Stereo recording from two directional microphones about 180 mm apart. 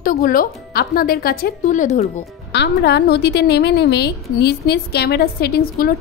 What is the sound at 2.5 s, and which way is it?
A woman's voice, 70° left (ahead or behind).